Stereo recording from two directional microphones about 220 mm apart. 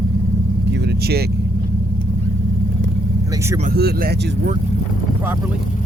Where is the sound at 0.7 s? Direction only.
50° right (ahead or behind).